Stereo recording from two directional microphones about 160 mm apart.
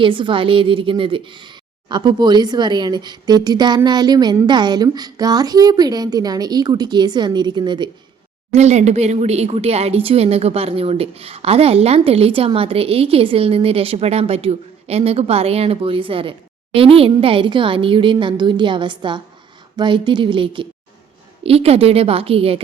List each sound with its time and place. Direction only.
0.0 s speech: 30° right (ahead or behind)
8.5 s speech: 45° right (ahead or behind)